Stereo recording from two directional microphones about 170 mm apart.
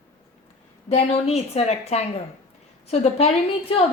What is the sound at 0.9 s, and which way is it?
A woman's voice, 40° left (ahead or behind).